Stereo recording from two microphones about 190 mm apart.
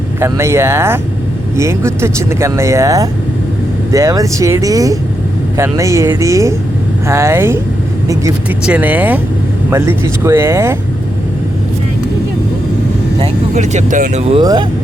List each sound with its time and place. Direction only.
0.2 s speech: 15° right (ahead or behind)
13.1 s speech: 35° right (ahead or behind)
14.4 s speech: 20° right (ahead or behind)